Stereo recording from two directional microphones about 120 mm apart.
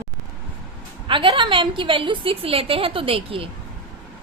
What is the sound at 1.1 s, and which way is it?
A woman's voice, 45° right (ahead or behind).